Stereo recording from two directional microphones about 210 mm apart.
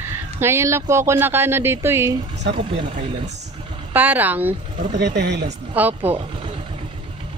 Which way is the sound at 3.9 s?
10° right (ahead or behind).